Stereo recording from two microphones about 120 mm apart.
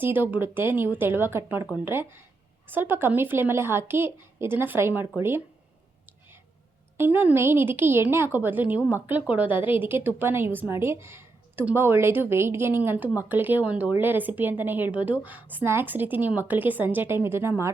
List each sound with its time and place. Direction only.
0.0 s a woman's voice: 15° right (ahead or behind)
6.9 s a woman's voice: 15° right (ahead or behind)